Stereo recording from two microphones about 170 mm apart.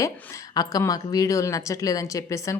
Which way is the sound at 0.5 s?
20° left (ahead or behind).